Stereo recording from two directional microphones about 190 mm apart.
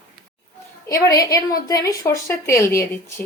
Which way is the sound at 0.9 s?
15° left (ahead or behind).